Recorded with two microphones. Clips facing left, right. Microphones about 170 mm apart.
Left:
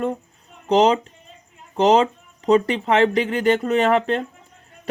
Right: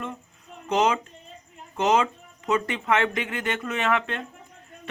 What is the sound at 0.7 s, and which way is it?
Speech, 35° left (ahead or behind).